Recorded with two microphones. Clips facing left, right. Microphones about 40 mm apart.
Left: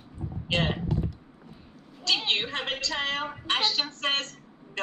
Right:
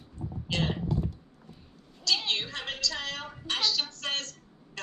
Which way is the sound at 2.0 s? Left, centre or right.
Left.